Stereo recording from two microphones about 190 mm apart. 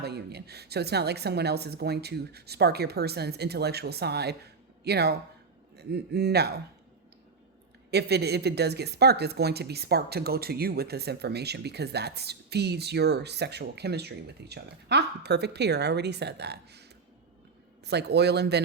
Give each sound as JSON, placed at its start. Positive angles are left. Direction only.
{"t": 0.0, "sound": "a man's voice", "side_deg": -60}
{"t": 7.9, "sound": "speech", "side_deg": -60}
{"t": 17.8, "sound": "speech", "side_deg": -60}